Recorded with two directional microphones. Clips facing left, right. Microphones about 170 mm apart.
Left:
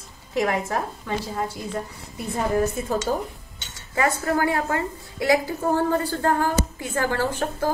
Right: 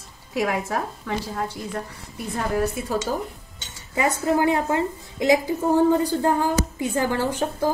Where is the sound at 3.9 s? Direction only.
20° right (ahead or behind).